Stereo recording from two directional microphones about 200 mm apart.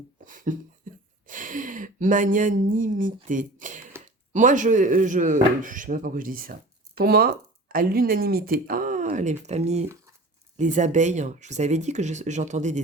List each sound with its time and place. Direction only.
0.3 s speech: 40° right (ahead or behind)